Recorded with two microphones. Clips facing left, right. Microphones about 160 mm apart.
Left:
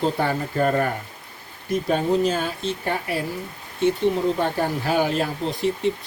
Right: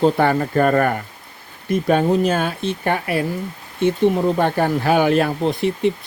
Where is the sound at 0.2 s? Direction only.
65° right (ahead or behind).